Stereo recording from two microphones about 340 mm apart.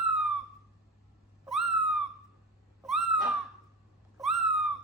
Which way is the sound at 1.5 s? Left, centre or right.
Centre.